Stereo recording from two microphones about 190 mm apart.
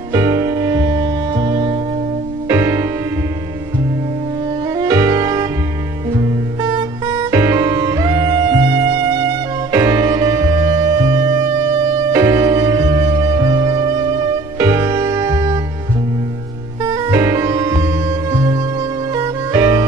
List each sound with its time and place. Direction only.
0.1 s music: 15° right (ahead or behind)
4.7 s music: 20° right (ahead or behind)
16.8 s music: 20° right (ahead or behind)